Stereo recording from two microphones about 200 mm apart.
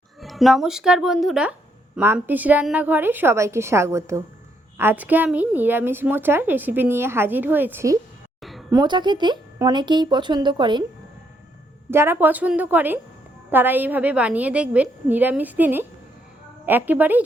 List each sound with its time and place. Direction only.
0.2 s a woman's voice: centre (ahead or behind)
8.4 s a sound: centre (ahead or behind)
8.7 s a woman's voice: 20° right (ahead or behind)
11.9 s a woman's voice: 10° right (ahead or behind)